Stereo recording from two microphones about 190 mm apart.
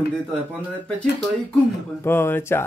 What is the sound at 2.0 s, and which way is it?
Speech, 10° left (ahead or behind).